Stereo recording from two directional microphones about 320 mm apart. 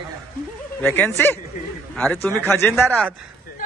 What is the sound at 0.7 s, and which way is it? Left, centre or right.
Speech, centre.